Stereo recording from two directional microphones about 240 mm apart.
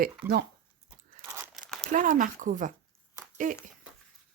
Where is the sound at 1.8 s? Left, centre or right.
Right.